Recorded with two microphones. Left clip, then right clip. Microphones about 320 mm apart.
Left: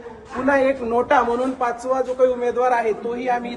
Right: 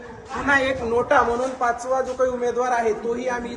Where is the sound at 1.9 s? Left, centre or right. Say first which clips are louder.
Left 3 dB; left.